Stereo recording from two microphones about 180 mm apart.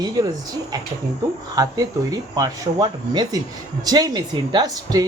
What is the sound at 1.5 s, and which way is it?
A man's voice, 20° right (ahead or behind).